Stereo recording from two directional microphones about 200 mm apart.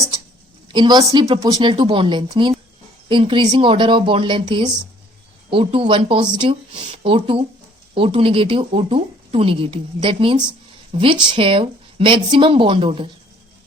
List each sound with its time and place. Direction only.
0.7 s a woman's voice: 20° right (ahead or behind)